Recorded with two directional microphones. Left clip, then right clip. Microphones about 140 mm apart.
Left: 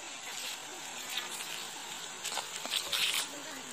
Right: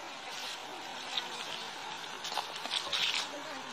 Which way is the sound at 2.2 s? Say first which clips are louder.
Right 1 dB; 50° left (ahead or behind).